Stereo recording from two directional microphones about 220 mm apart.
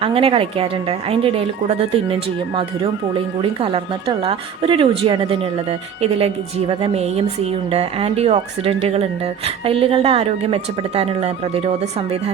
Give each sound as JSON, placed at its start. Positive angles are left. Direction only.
{"t": 0.0, "sound": "speech", "side_deg": -25}
{"t": 3.4, "sound": "speech", "side_deg": -25}